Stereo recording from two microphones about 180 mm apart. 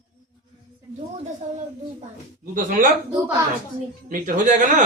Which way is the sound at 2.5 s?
45° right (ahead or behind).